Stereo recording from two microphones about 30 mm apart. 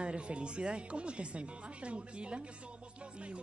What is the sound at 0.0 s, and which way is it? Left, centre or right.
A woman's voice, right.